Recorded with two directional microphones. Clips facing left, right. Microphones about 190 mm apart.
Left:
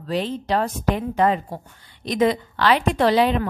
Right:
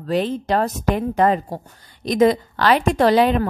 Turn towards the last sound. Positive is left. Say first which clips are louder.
# right 3 dB
turn(degrees=-45)  # may be behind; listen again after turning